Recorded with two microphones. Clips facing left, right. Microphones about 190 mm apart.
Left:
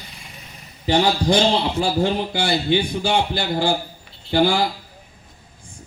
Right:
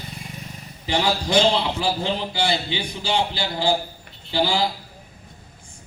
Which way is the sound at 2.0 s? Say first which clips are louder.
Left 4 dB; 50° left (ahead or behind).